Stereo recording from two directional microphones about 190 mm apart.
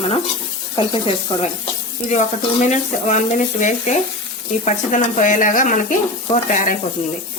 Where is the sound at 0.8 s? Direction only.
30° left (ahead or behind).